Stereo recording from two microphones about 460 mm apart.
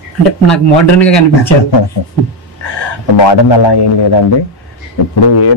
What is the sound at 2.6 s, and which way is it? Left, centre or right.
Speech, left.